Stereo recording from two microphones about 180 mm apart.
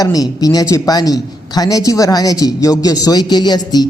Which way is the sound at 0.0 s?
20° left (ahead or behind).